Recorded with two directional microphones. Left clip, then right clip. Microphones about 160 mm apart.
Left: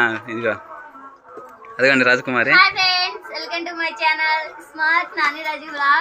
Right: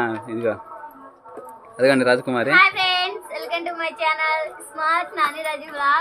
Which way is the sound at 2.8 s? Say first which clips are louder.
Left 2 dB; 35° right (ahead or behind).